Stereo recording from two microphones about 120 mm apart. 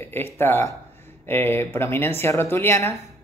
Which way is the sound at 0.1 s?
20° left (ahead or behind).